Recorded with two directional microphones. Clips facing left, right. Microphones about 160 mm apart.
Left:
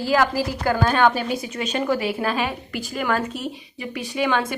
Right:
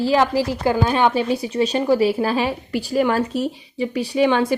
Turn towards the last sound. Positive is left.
turn(degrees=-30)  # may be behind; listen again after turning